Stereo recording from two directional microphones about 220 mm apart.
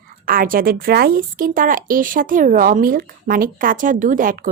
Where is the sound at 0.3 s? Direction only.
40° right (ahead or behind).